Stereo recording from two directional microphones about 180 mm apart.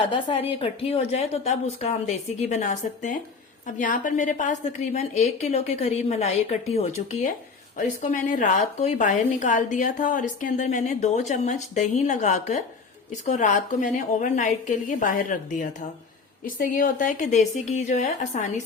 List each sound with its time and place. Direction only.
0.0 s a woman's voice: 30° left (ahead or behind)